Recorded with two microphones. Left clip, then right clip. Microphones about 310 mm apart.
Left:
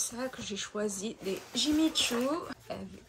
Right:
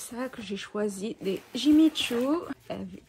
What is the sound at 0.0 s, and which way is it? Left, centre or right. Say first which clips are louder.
Speech: even; right.